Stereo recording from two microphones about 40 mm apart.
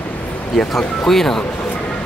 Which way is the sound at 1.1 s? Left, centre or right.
Centre.